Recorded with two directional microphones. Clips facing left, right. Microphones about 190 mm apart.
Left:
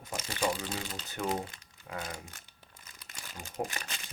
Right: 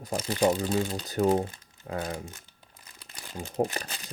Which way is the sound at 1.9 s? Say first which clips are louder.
Right 7 dB; 35° right (ahead or behind).